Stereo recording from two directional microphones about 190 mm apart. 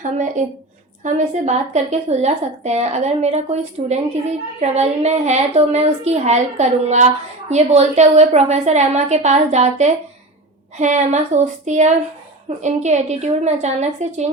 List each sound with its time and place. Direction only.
0.0 s a woman's voice: 40° right (ahead or behind)